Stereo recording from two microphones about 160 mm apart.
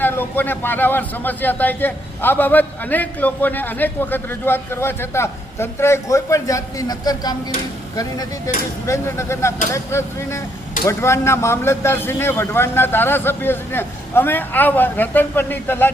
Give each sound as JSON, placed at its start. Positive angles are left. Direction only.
{"t": 0.0, "sound": "a man's voice", "side_deg": 10}